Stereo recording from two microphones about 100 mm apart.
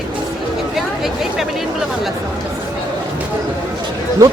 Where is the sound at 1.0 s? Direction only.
5° right (ahead or behind).